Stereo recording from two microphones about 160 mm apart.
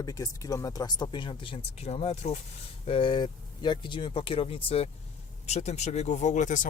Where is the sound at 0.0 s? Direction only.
20° left (ahead or behind).